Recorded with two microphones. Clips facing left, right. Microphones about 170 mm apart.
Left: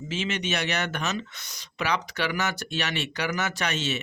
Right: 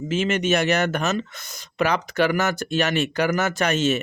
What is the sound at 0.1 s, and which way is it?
Speech, 50° right (ahead or behind).